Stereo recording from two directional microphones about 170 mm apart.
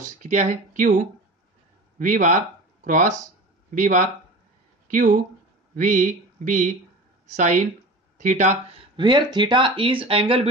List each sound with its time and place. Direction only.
0.0 s speech: 45° right (ahead or behind)
2.0 s speech: 45° right (ahead or behind)
8.9 s speech: 25° right (ahead or behind)